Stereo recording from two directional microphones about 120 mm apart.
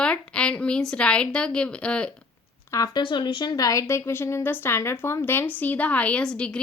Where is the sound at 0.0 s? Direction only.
10° left (ahead or behind).